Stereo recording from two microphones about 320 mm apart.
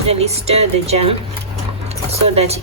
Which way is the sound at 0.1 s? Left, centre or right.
Centre.